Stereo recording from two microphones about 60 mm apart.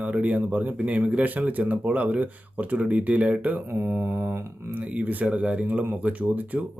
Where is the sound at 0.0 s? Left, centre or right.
Right.